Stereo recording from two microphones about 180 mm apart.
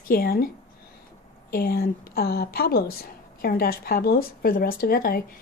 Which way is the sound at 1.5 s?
55° left (ahead or behind).